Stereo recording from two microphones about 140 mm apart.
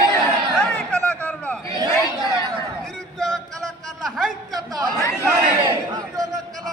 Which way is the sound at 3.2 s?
Centre (ahead or behind).